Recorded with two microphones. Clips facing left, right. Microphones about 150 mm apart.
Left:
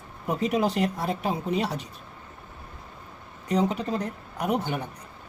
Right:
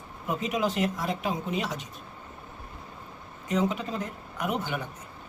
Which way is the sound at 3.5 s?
35° left (ahead or behind).